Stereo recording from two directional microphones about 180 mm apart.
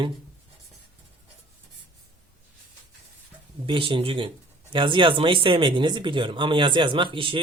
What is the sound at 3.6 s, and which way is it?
Speech, 30° right (ahead or behind).